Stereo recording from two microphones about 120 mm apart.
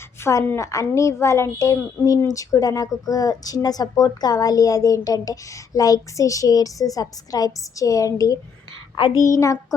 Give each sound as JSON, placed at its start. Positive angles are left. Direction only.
{"t": 0.2, "sound": "a woman's voice", "side_deg": 20}